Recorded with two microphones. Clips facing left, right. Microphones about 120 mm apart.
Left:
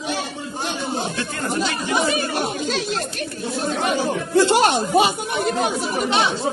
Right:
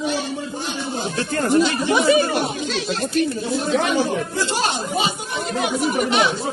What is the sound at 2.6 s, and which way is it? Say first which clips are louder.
Speech: even; 45° left (ahead or behind).